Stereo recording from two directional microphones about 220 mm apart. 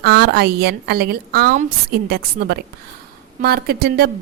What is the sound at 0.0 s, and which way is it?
A woman's voice, 45° right (ahead or behind).